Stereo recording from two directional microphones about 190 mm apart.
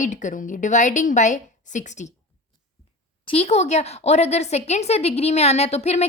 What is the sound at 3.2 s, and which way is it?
A woman's voice, 30° left (ahead or behind).